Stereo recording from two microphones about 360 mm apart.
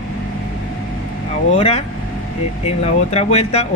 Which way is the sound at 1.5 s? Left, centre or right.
Centre.